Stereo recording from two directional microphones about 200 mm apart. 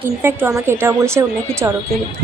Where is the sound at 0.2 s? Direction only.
10° right (ahead or behind).